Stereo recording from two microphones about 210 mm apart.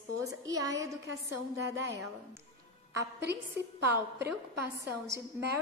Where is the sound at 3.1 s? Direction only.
50° right (ahead or behind).